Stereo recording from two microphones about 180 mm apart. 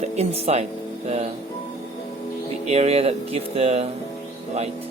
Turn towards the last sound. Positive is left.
turn(degrees=-35)  # may be behind; listen again after turning